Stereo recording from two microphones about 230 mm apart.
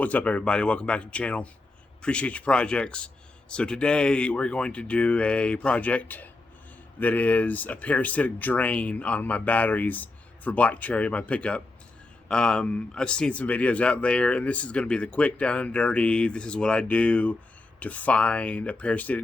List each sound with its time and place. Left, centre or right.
0.0 s speech: centre